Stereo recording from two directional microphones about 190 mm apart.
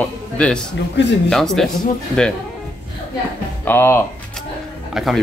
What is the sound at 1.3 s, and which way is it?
Speech, centre (ahead or behind).